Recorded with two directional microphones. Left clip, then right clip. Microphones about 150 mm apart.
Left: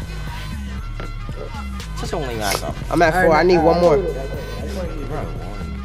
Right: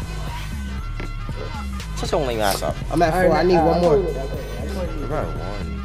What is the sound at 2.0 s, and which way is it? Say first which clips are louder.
Speech: right 4 dB; 10° right (ahead or behind).